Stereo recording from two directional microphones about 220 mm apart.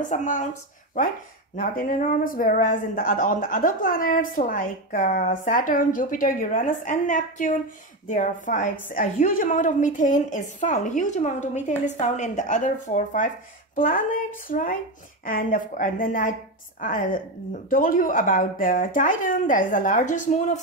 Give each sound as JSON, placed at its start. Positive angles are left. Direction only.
{"t": 0.1, "sound": "speech", "side_deg": 35}
{"t": 1.6, "sound": "speech", "side_deg": 40}